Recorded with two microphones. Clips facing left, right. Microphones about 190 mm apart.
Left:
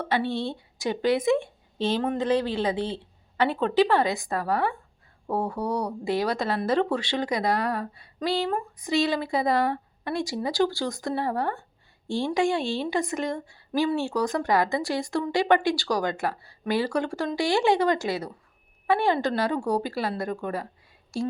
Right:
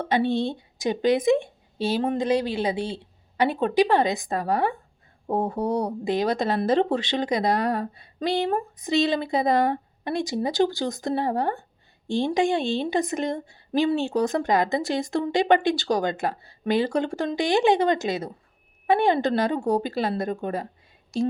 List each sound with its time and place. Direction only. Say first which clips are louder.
0.0 s a woman's voice: right 4 dB; 20° right (ahead or behind)